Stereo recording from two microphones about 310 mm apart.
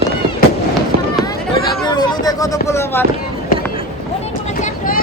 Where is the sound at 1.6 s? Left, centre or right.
Centre.